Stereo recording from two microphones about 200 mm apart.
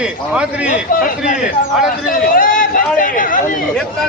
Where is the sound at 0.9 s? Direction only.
45° left (ahead or behind).